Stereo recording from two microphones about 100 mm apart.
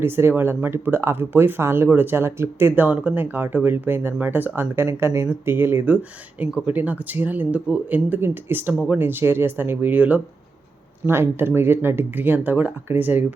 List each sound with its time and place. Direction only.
0.0 s speech: 25° right (ahead or behind)